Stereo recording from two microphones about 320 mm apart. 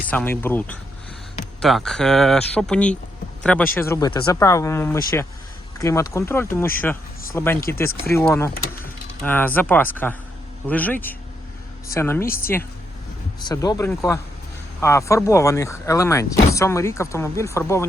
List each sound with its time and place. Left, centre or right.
0.1 s speech: centre